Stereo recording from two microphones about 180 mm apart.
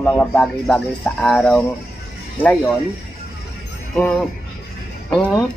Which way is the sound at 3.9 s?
5° left (ahead or behind).